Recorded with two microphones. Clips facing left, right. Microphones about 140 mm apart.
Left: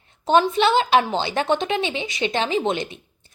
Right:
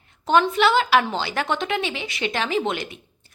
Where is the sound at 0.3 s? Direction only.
20° left (ahead or behind).